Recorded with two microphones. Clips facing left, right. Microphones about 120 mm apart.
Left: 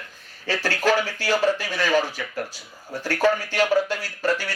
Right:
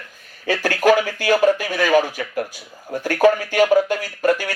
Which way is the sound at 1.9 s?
50° right (ahead or behind).